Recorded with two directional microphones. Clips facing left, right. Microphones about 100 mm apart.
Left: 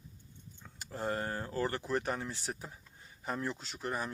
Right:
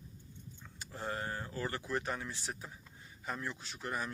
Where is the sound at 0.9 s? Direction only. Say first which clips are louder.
Left 4 dB; 40° left (ahead or behind).